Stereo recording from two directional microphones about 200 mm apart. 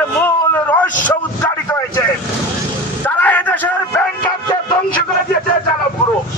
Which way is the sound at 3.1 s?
10° left (ahead or behind).